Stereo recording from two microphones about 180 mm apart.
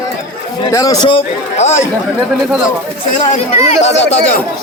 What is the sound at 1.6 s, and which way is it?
Speech, 40° left (ahead or behind).